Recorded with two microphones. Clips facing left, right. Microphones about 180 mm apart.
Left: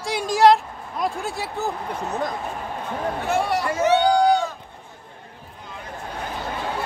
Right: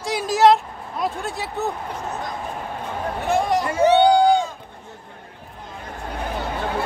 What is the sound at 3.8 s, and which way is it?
Speech, 30° right (ahead or behind).